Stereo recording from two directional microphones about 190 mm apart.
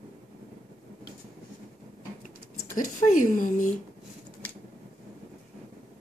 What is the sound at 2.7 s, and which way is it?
Speech, 45° left (ahead or behind).